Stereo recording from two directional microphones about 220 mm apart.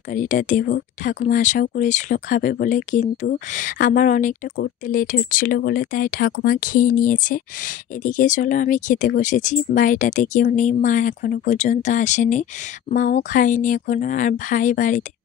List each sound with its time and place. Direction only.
0.1 s speech: 35° left (ahead or behind)